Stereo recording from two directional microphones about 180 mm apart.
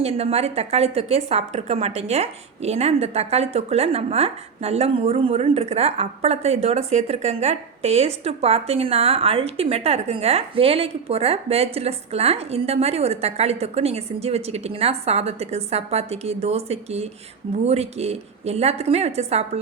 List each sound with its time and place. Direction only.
0.0 s a woman's voice: 35° right (ahead or behind)